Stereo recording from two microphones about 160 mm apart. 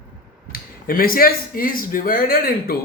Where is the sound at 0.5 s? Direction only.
65° left (ahead or behind).